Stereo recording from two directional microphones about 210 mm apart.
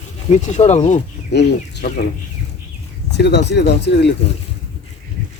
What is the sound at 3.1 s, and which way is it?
Speech, 55° left (ahead or behind).